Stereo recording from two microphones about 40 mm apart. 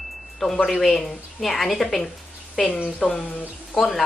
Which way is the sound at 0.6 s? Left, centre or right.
Centre.